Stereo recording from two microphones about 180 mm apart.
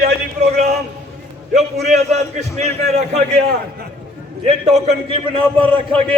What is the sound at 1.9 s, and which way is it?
A man's voice, 40° right (ahead or behind).